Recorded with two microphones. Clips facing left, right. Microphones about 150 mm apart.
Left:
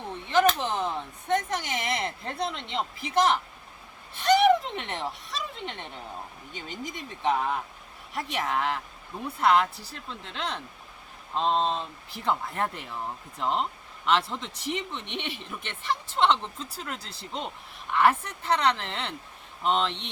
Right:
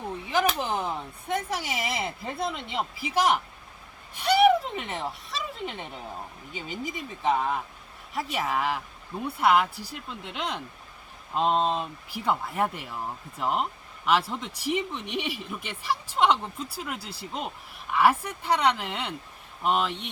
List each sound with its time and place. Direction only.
0.3 s speech: 10° right (ahead or behind)
4.1 s a sound: 10° right (ahead or behind)
6.5 s speech: 5° right (ahead or behind)